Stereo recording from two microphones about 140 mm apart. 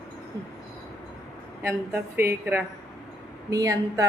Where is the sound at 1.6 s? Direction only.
15° right (ahead or behind).